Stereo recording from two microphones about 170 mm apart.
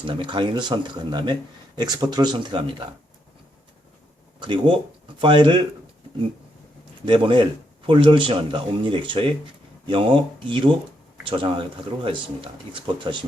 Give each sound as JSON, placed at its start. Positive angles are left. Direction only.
{"t": 0.0, "sound": "speech", "side_deg": -30}
{"t": 4.4, "sound": "speech", "side_deg": -30}
{"t": 7.0, "sound": "speech", "side_deg": -30}